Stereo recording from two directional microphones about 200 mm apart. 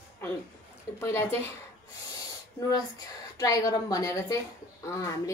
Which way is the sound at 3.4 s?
15° left (ahead or behind).